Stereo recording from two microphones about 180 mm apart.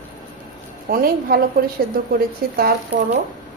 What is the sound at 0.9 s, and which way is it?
A woman's voice, 55° right (ahead or behind).